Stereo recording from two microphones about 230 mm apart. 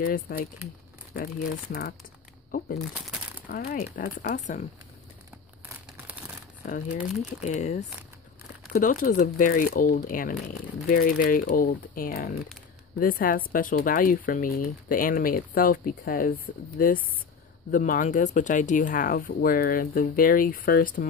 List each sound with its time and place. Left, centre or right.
0.0 s speech: left
3.4 s speech: left
6.6 s speech: left